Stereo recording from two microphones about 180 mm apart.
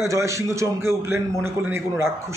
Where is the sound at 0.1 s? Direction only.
15° right (ahead or behind).